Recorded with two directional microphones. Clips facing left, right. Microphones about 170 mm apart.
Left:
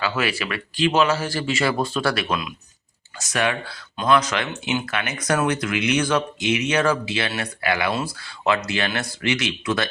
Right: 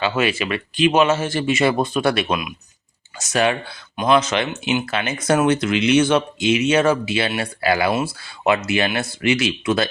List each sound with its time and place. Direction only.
0.0 s speech: 25° right (ahead or behind)